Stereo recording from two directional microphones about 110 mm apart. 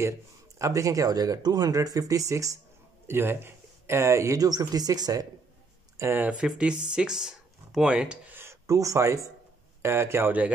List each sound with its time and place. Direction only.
0.6 s speech: 30° right (ahead or behind)
5.9 s speech: 20° right (ahead or behind)
8.4 s speech: 25° right (ahead or behind)